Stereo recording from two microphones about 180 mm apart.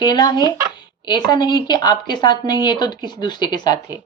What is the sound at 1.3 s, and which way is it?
Speech, 25° left (ahead or behind).